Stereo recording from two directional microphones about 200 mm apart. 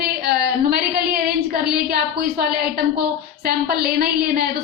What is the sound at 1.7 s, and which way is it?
A woman's voice, 50° right (ahead or behind).